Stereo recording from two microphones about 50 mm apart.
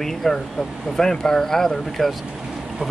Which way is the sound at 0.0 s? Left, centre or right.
Centre.